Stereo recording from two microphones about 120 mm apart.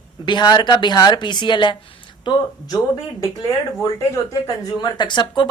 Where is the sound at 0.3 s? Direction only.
40° left (ahead or behind).